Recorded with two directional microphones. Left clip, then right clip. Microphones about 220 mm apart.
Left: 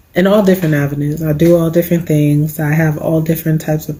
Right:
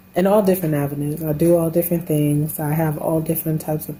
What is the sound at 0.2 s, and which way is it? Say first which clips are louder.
Speech: left 5 dB; 10° left (ahead or behind).